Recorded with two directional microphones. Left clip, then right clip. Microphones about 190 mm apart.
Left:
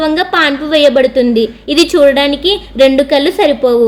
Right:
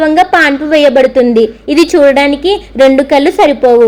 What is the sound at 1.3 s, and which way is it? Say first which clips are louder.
Speech: right 4 dB; 50° right (ahead or behind).